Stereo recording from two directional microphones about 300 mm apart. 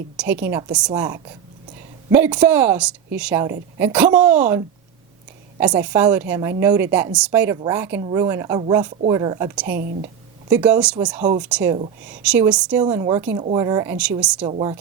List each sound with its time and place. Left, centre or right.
0.2 s a woman's voice: centre
9.7 s speech: right
10.5 s a woman's voice: centre
14.4 s a woman's voice: centre